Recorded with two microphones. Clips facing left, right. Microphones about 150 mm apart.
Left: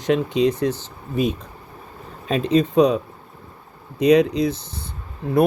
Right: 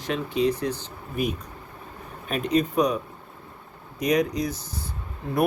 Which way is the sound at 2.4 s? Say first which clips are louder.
Left 6 dB; 30° left (ahead or behind).